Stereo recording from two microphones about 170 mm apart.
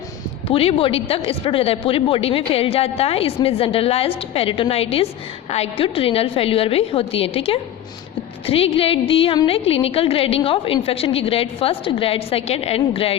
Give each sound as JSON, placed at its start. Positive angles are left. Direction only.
{"t": 0.4, "sound": "a woman's voice", "side_deg": 35}